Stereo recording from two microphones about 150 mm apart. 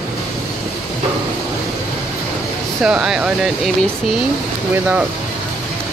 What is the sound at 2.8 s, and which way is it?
Speech, 5° right (ahead or behind).